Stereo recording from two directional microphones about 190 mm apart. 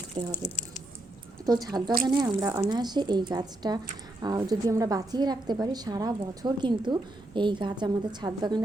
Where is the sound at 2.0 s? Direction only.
20° right (ahead or behind).